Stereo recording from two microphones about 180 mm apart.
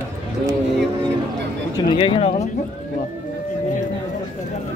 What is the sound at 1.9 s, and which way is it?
Speech, 30° left (ahead or behind).